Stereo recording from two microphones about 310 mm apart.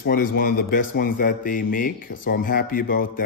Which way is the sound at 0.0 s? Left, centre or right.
Left.